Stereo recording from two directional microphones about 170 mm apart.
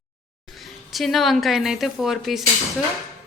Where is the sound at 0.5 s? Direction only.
Centre (ahead or behind).